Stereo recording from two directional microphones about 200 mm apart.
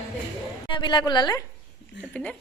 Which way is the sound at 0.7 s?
25° left (ahead or behind).